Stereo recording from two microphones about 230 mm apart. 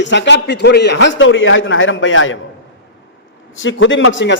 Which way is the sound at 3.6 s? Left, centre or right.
Left.